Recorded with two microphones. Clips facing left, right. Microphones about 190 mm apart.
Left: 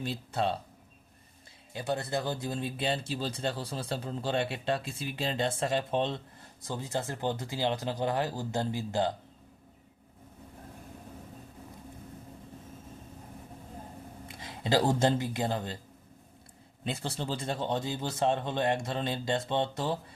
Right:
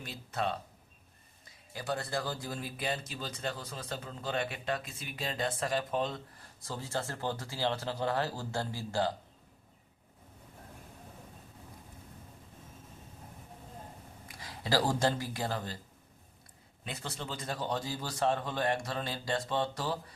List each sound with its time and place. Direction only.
0.0 s speech: 30° left (ahead or behind)
1.7 s speech: 20° left (ahead or behind)
14.3 s speech: 25° left (ahead or behind)
16.8 s speech: 30° left (ahead or behind)